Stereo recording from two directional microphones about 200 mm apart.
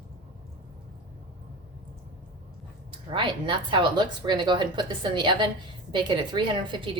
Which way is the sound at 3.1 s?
25° right (ahead or behind).